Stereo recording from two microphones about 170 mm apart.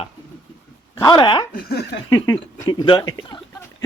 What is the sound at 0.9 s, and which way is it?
Speech, 25° left (ahead or behind).